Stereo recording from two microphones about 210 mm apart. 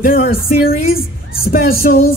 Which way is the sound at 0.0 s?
45° left (ahead or behind).